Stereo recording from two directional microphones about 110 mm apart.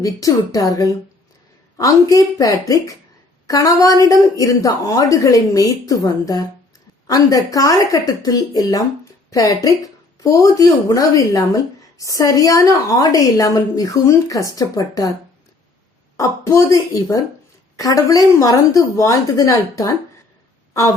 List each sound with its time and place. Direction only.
0.0 s speech: 30° left (ahead or behind)
16.1 s a child's voice: 25° left (ahead or behind)